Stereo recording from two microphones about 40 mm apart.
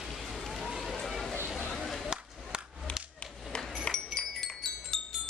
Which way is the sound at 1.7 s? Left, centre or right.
Centre.